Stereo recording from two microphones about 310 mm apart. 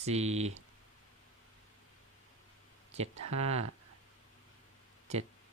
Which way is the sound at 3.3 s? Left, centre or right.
Centre.